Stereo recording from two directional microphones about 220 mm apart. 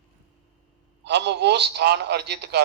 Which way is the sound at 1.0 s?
50° right (ahead or behind).